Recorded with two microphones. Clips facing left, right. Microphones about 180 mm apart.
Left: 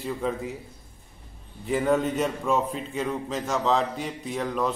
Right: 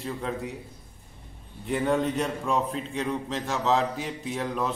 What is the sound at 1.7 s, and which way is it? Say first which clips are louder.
A man's voice: left 2 dB; centre (ahead or behind).